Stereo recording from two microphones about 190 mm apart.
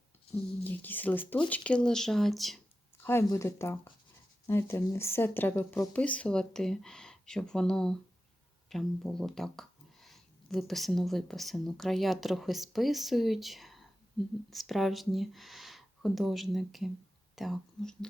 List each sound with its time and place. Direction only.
0.7 s speech: 10° left (ahead or behind)
3.0 s speech: 15° left (ahead or behind)